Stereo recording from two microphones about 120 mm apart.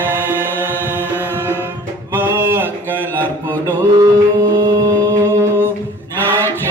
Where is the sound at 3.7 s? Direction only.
35° right (ahead or behind).